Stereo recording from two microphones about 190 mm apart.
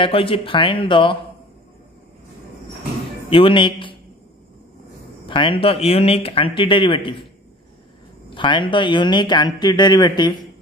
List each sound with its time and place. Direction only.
0.0 s speech: 30° left (ahead or behind)
3.3 s speech: 25° left (ahead or behind)
5.3 s speech: 25° left (ahead or behind)
8.4 s speech: 25° left (ahead or behind)